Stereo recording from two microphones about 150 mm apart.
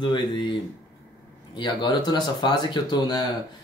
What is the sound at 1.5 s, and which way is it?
Speech, 30° left (ahead or behind).